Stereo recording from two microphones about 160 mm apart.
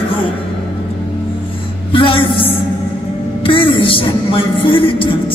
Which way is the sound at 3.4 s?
35° left (ahead or behind).